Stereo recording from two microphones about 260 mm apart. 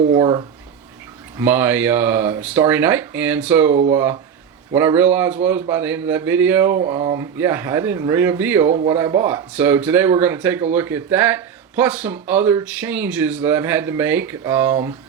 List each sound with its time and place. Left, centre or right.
0.1 s speech: centre